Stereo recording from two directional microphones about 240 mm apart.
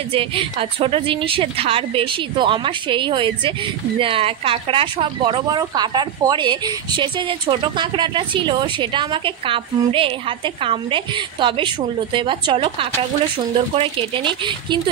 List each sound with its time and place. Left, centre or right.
0.1 s speech: right